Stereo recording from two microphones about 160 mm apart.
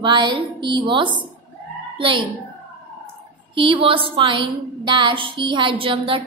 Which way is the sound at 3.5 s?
35° right (ahead or behind).